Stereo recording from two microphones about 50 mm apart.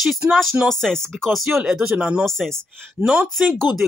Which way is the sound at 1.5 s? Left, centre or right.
Centre.